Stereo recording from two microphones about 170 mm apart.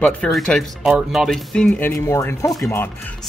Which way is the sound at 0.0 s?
5° left (ahead or behind).